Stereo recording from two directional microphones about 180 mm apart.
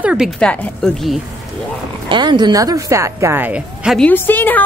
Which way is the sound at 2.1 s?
25° right (ahead or behind).